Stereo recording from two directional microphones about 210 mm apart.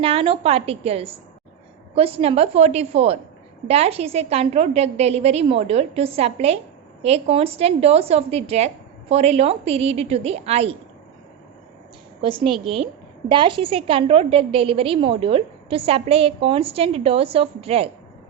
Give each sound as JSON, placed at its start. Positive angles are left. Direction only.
{"t": 0.0, "sound": "a woman's voice", "side_deg": -25}
{"t": 12.2, "sound": "a woman's voice", "side_deg": -25}